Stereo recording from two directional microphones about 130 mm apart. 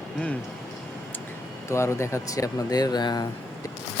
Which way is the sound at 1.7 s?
20° left (ahead or behind).